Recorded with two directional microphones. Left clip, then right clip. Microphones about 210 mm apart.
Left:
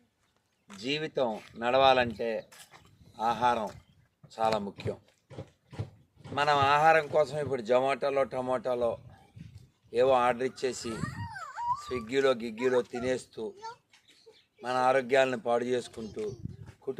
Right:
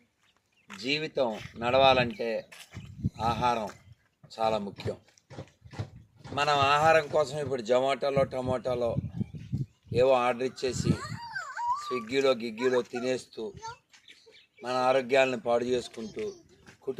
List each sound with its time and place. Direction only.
0.8 s a man's voice: 5° right (ahead or behind)
5.3 s a sound: 30° left (ahead or behind)
6.3 s a man's voice: 10° right (ahead or behind)
10.9 s a sound: 30° left (ahead or behind)
11.8 s a man's voice: 5° right (ahead or behind)
14.6 s a man's voice: 10° right (ahead or behind)